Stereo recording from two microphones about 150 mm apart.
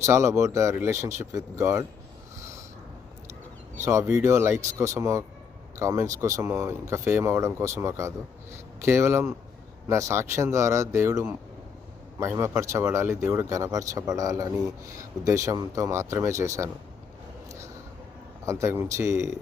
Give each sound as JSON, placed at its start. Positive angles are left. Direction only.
{"t": 0.0, "sound": "speech", "side_deg": -20}
{"t": 3.8, "sound": "speech", "side_deg": -20}
{"t": 18.4, "sound": "speech", "side_deg": -20}